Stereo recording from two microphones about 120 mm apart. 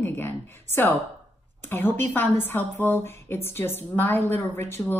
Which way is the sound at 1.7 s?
15° left (ahead or behind).